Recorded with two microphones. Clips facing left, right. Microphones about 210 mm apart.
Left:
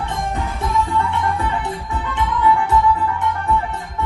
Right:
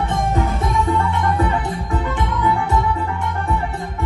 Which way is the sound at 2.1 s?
45° right (ahead or behind).